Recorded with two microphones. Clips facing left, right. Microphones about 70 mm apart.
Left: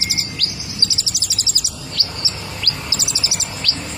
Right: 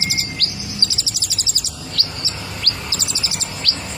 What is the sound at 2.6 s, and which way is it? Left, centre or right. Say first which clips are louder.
Chirp: left 1 dB; right.